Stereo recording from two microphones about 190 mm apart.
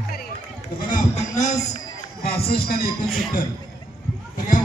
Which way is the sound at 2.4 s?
55° left (ahead or behind).